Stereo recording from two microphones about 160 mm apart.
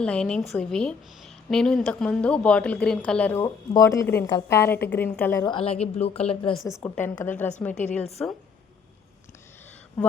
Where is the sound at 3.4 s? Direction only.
20° left (ahead or behind).